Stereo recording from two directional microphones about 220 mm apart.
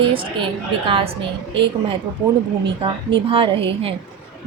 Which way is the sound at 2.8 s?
25° right (ahead or behind).